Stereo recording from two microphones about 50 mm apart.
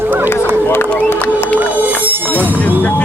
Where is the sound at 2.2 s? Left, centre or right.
Left.